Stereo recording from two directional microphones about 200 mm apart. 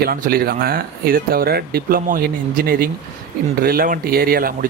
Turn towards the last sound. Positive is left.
turn(degrees=-45)  # may be behind; listen again after turning